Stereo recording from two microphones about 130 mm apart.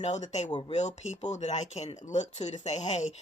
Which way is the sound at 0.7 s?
60° left (ahead or behind).